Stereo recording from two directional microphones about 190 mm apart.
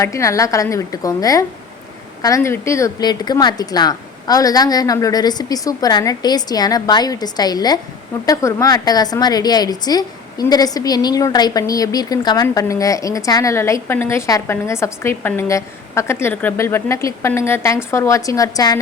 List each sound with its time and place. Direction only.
0.0 s a woman's voice: 15° left (ahead or behind)